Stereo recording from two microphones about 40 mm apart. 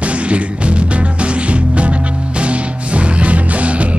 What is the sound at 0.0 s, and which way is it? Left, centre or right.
Music, right.